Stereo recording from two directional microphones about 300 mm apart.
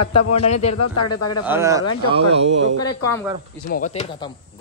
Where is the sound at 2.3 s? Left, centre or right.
Right.